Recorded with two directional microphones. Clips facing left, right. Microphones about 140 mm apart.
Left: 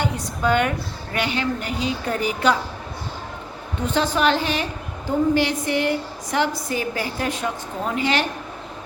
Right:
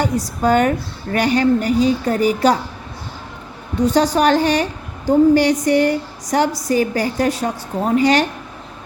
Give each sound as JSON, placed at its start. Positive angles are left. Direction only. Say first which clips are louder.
{"t": 0.0, "sound": "a woman's voice", "louder": "right 5 dB", "side_deg": -40}
{"t": 3.8, "sound": "a woman's voice", "louder": "right 7 dB", "side_deg": -35}